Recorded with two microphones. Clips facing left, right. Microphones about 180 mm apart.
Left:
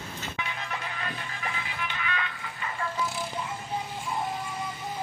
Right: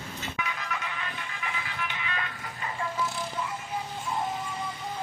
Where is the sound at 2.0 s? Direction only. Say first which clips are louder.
Left 2 dB; 35° right (ahead or behind).